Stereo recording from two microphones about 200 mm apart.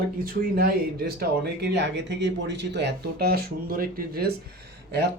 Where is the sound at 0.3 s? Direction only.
45° right (ahead or behind).